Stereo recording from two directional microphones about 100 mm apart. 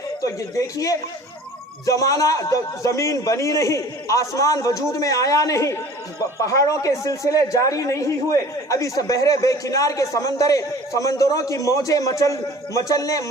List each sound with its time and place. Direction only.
0.2 s a man's voice: 35° left (ahead or behind)